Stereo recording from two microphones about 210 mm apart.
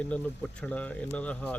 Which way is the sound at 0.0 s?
5° left (ahead or behind).